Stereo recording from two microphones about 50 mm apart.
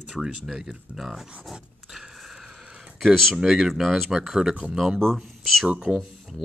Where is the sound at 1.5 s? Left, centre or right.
Centre.